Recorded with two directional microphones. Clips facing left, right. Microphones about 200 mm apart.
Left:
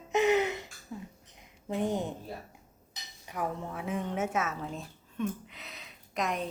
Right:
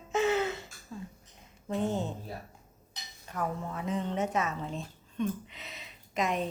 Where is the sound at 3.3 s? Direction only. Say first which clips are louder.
Even; 10° left (ahead or behind).